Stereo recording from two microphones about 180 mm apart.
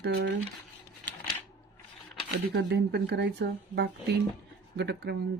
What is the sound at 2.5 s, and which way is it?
Speech, 70° right (ahead or behind).